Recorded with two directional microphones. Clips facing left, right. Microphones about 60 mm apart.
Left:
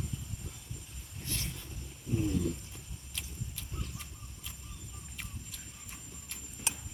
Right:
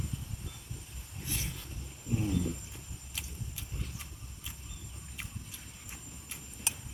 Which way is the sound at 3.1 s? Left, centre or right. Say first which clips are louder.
Even; centre.